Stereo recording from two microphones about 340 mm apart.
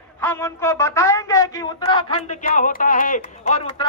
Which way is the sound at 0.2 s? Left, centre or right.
Centre.